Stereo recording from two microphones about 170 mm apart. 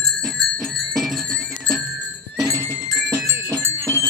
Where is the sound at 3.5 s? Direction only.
20° right (ahead or behind).